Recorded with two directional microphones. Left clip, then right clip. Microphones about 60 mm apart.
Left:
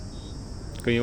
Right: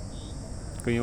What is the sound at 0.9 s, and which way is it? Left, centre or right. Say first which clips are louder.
Speech: left 4 dB; centre.